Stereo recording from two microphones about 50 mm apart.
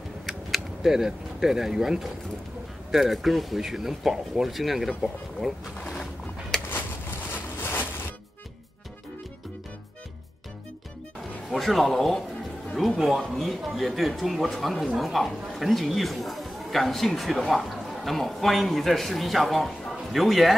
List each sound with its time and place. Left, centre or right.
0.3 s speech: centre
5.8 s boat: centre
6.5 s a sound: centre
11.5 s speech: centre